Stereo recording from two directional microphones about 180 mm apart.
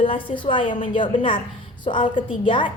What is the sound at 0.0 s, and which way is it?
A woman's voice, 30° left (ahead or behind).